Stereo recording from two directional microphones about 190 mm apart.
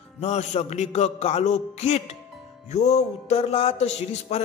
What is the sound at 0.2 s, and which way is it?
A man's voice, 35° left (ahead or behind).